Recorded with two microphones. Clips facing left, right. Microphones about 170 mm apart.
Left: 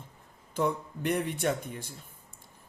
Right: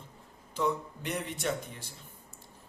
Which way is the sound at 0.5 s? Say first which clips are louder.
Left 1 dB; 55° left (ahead or behind).